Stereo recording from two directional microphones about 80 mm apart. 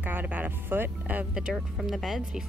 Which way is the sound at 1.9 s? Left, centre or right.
Centre.